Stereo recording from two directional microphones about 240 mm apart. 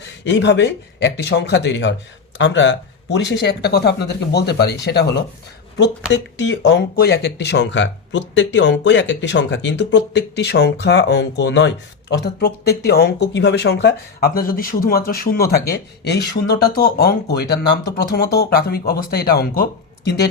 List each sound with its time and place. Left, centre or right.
0.3 s speech: left